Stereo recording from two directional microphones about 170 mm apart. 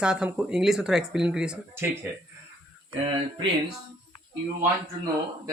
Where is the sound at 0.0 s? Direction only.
5° right (ahead or behind).